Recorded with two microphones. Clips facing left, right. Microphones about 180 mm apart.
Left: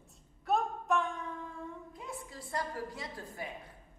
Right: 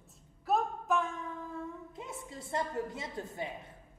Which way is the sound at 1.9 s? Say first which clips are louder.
Right 1 dB; 25° right (ahead or behind).